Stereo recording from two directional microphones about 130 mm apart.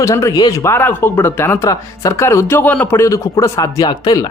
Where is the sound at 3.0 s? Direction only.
25° left (ahead or behind).